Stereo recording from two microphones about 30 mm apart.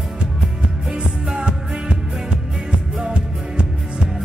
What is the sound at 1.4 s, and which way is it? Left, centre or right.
Music, right.